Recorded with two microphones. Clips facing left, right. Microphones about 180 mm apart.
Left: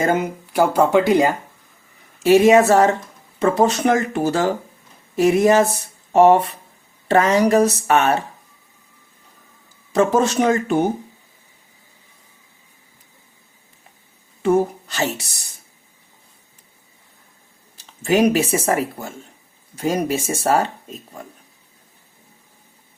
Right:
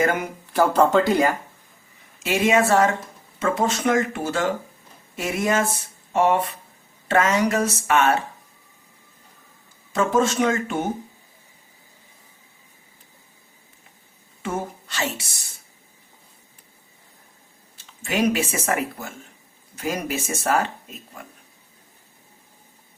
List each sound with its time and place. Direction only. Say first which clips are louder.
0.0 s speech: left 3 dB; 25° left (ahead or behind)
2.1 s speech: left 8 dB; 35° left (ahead or behind)
10.1 s speech: left 3 dB; 40° left (ahead or behind)
14.4 s speech: left 11 dB; 40° left (ahead or behind)
18.0 s speech: left 6 dB; 40° left (ahead or behind)